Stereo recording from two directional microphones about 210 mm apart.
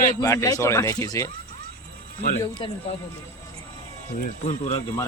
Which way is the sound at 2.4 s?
20° left (ahead or behind).